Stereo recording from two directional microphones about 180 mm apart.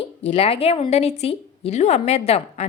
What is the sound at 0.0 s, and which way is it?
A woman's voice, 35° left (ahead or behind).